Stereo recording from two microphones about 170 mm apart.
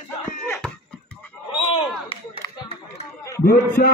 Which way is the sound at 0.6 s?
5° left (ahead or behind).